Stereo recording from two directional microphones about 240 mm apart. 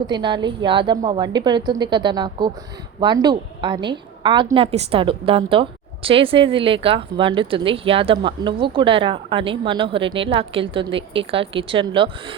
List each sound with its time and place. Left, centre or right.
0.1 s a woman's voice: centre